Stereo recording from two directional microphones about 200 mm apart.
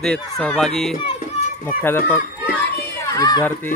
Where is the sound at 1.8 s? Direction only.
10° left (ahead or behind).